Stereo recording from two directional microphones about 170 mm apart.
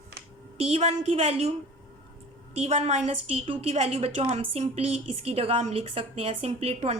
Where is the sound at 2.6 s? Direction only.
40° right (ahead or behind).